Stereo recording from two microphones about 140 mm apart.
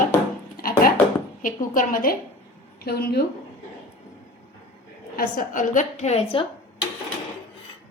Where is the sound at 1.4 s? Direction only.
75° left (ahead or behind).